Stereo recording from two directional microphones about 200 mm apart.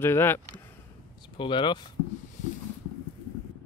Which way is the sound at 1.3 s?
25° left (ahead or behind).